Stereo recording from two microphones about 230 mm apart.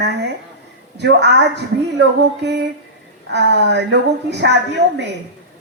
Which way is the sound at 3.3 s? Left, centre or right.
Right.